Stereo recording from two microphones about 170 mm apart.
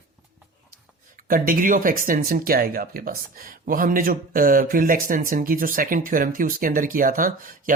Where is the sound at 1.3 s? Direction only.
55° right (ahead or behind).